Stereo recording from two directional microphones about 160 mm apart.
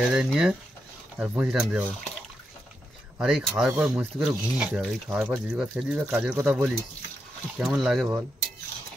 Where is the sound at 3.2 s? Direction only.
5° right (ahead or behind).